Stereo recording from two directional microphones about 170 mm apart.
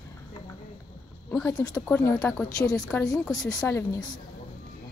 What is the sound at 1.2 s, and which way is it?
Speech, 10° left (ahead or behind).